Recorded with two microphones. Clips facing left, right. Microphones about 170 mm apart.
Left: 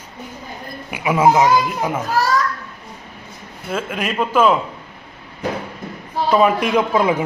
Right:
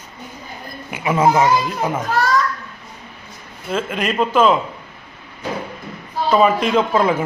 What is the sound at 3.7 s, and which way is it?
Speech, 5° left (ahead or behind).